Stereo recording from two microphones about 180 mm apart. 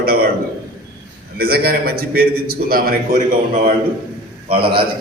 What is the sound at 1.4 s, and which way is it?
A man's voice, 55° right (ahead or behind).